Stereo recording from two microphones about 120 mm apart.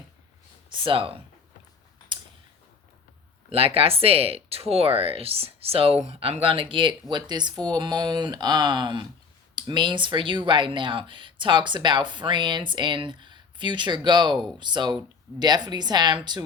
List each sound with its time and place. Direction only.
0.7 s speech: 45° right (ahead or behind)
3.5 s speech: 50° right (ahead or behind)